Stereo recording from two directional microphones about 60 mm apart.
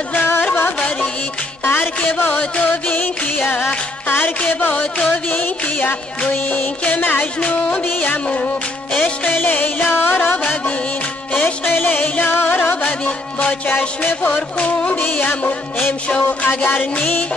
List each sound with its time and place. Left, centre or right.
0.1 s music: left
1.6 s music: left
4.6 s music: left
12.8 s music: left